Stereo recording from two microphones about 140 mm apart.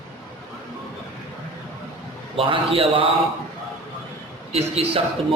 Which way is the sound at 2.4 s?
40° right (ahead or behind).